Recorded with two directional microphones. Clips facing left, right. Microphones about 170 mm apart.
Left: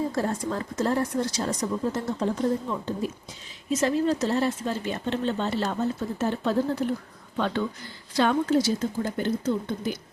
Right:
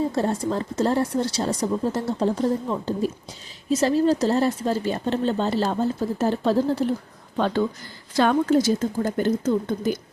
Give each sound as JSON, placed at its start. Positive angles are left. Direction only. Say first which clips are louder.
{"t": 0.2, "sound": "speech", "louder": "right 4 dB", "side_deg": -30}
{"t": 8.1, "sound": "a woman's voice", "louder": "right 3 dB", "side_deg": -50}